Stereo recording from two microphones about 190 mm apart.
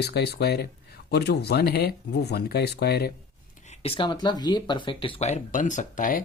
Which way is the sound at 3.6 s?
30° left (ahead or behind).